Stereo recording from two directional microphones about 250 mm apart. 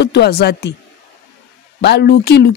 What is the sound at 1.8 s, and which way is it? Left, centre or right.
Speech, left.